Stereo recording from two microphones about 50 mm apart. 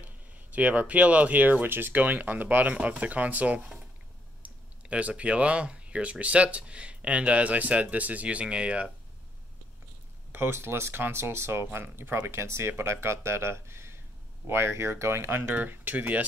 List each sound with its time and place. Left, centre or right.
0.0 s speech: right
4.8 s speech: right
10.3 s speech: right
15.5 s speech: right